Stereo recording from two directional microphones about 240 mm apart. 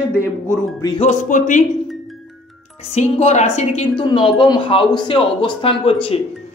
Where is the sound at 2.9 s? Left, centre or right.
Left.